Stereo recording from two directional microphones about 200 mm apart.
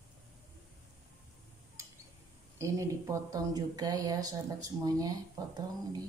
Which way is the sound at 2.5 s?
15° right (ahead or behind).